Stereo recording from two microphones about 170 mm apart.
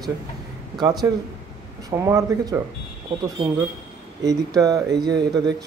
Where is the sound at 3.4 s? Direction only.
25° right (ahead or behind).